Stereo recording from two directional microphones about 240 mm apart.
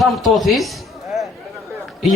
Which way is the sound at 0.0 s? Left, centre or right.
Centre.